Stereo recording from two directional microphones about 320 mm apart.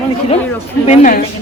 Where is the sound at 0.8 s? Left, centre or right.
Left.